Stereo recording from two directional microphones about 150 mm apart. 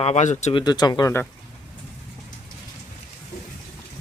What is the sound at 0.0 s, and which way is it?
Speech, 50° left (ahead or behind).